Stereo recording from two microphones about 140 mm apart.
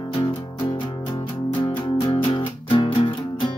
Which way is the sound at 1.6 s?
35° left (ahead or behind).